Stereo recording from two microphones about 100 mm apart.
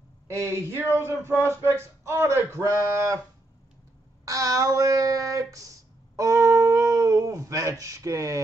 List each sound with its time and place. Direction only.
0.3 s speech: 25° right (ahead or behind)
4.2 s speech: 35° right (ahead or behind)